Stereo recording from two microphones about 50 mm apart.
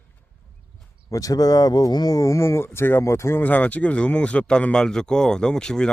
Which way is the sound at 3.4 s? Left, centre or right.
Left.